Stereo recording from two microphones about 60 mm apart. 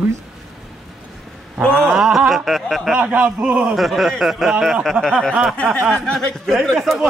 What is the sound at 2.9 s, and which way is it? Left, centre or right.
Speech, right.